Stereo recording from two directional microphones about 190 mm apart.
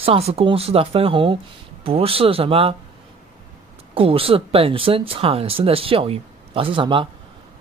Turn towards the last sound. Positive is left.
turn(degrees=-25)  # may be behind; listen again after turning